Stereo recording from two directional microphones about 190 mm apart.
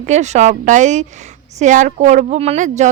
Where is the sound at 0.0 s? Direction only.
40° right (ahead or behind).